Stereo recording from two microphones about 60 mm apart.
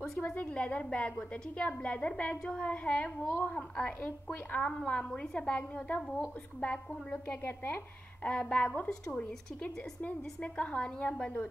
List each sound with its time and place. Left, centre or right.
0.2 s a woman's voice: left
3.3 s a woman's voice: left
3.5 s a woman's voice: centre
7.4 s a woman's voice: left